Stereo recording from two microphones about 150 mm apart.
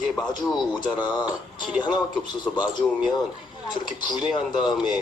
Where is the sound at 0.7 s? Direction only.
30° left (ahead or behind).